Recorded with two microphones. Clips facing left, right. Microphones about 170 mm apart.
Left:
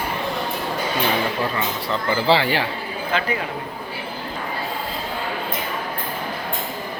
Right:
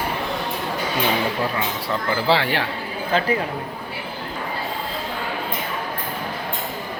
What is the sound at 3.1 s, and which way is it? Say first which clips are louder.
Speech: right 3 dB; 40° right (ahead or behind).